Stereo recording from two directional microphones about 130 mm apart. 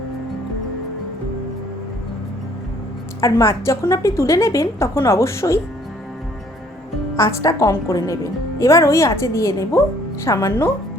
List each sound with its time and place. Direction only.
3.2 s a woman's voice: 25° left (ahead or behind)
7.2 s a woman's voice: 25° left (ahead or behind)